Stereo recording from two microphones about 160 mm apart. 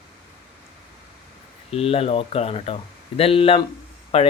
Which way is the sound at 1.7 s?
35° left (ahead or behind).